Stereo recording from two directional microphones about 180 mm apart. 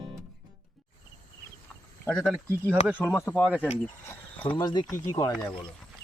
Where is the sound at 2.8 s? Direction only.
10° right (ahead or behind).